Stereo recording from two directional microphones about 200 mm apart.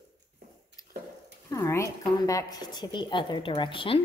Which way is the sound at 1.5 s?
15° left (ahead or behind).